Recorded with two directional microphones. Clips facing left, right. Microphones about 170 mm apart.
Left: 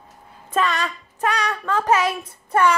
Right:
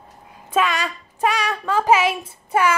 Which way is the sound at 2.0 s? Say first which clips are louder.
Right 2 dB; 25° right (ahead or behind).